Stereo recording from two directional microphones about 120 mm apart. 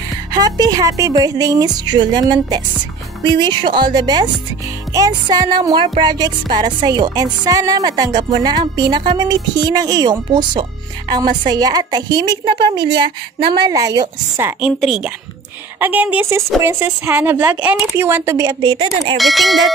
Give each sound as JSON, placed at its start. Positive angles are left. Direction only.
{"t": 0.3, "sound": "music", "side_deg": -35}
{"t": 14.6, "sound": "a woman's voice", "side_deg": -5}
{"t": 15.8, "sound": "speech", "side_deg": -15}
{"t": 18.5, "sound": "music", "side_deg": -40}
{"t": 19.1, "sound": "a woman's voice", "side_deg": 0}